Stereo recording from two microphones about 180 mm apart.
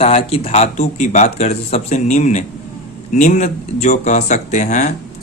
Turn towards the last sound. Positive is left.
turn(degrees=45)  # may be behind; listen again after turning